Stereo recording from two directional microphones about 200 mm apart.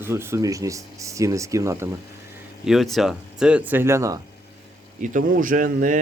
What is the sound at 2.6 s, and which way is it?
Speech, centre (ahead or behind).